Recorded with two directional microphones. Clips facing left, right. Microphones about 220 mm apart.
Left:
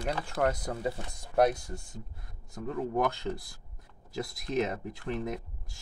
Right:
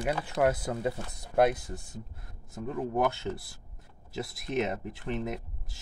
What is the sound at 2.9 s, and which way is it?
Speech, 5° right (ahead or behind).